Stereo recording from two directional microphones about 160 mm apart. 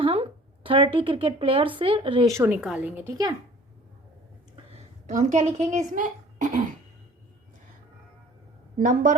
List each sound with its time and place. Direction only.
0.0 s speech: 35° right (ahead or behind)
2.3 s a woman's voice: 10° right (ahead or behind)
4.5 s a woman's voice: 45° right (ahead or behind)
8.8 s a woman's voice: 55° right (ahead or behind)